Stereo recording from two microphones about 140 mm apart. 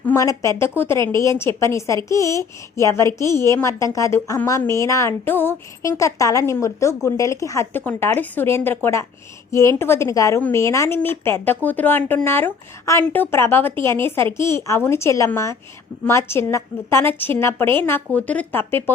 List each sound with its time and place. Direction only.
0.0 s a woman's voice: 20° left (ahead or behind)